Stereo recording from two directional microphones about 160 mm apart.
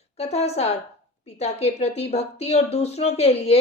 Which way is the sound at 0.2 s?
40° left (ahead or behind).